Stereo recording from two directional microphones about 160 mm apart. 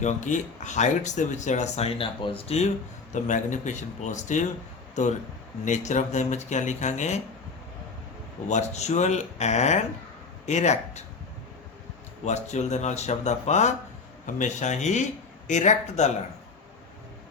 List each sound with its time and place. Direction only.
0.0 s speech: 50° left (ahead or behind)
5.6 s speech: 50° left (ahead or behind)
8.4 s speech: 45° left (ahead or behind)
12.2 s speech: 45° left (ahead or behind)